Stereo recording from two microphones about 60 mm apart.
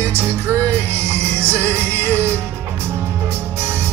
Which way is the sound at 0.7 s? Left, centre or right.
Right.